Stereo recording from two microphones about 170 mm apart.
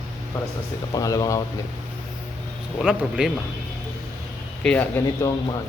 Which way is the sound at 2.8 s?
Centre (ahead or behind).